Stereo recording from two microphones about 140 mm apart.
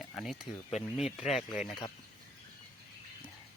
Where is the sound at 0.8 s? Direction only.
50° left (ahead or behind).